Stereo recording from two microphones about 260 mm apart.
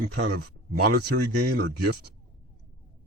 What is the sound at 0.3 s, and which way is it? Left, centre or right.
Speech, right.